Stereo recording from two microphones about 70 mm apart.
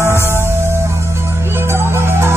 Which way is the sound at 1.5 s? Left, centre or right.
Right.